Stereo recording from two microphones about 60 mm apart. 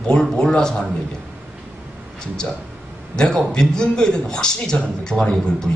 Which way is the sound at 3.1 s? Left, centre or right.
Centre.